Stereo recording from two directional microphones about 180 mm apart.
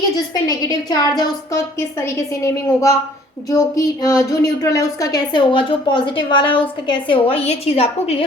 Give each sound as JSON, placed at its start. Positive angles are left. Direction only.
{"t": 0.4, "sound": "a woman's voice", "side_deg": 20}